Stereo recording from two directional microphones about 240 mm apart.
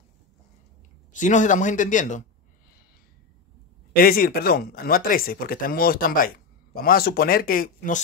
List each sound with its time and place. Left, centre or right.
1.1 s speech: left
3.9 s speech: left